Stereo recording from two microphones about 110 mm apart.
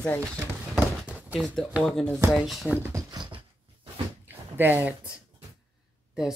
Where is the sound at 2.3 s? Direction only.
Centre (ahead or behind).